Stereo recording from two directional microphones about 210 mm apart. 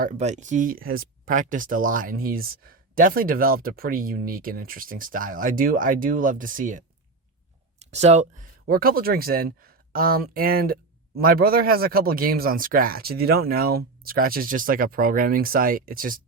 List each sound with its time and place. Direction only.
0.0 s speech: 35° right (ahead or behind)